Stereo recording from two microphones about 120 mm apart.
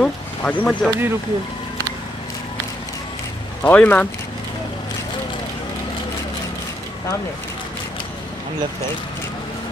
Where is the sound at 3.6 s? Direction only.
15° left (ahead or behind).